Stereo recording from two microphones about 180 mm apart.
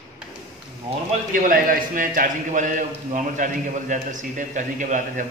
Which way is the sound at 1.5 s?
50° right (ahead or behind).